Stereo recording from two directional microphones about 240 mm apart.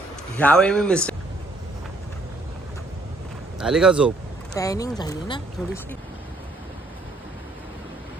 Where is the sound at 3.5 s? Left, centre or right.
Centre.